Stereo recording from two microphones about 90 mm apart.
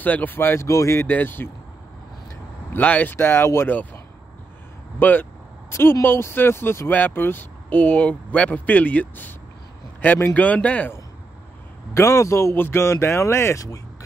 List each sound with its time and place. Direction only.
0.0 s speech: 20° left (ahead or behind); by 1.0 s 35° left (ahead or behind)
1.0 s speech: 20° left (ahead or behind)
2.7 s speech: 20° left (ahead or behind)
11.9 s a man's voice: 35° left (ahead or behind)